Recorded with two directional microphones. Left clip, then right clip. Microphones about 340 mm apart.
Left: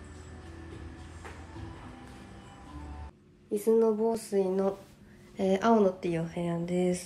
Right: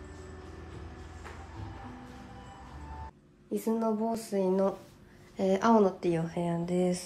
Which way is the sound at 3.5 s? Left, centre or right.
Centre.